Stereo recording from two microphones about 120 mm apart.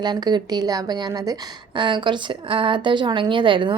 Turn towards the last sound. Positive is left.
turn(degrees=-40)  # may be behind; listen again after turning